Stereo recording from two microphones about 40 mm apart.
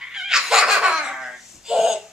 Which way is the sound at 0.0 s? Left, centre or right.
Centre.